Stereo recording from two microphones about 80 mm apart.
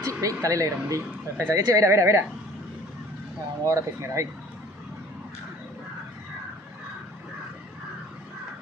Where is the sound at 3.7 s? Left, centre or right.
Right.